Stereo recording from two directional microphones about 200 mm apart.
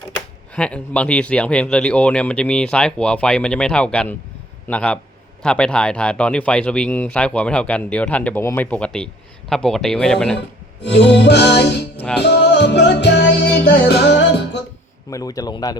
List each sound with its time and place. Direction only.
0.5 s speech: 5° left (ahead or behind)
10.8 s music: 60° left (ahead or behind)
15.1 s speech: 20° left (ahead or behind)